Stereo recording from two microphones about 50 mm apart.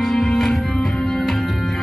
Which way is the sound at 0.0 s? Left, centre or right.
Centre.